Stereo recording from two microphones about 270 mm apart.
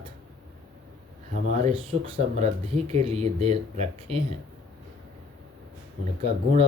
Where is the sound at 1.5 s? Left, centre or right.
Right.